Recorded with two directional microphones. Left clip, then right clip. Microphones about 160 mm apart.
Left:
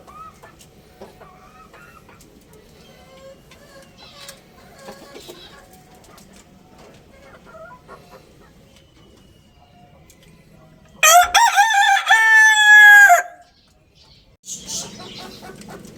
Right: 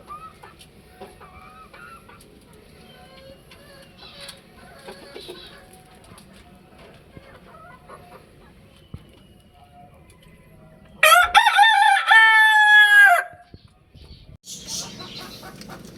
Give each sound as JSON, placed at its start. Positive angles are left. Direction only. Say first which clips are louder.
{"t": 11.2, "sound": "crowing", "louder": "left 1 dB", "side_deg": 45}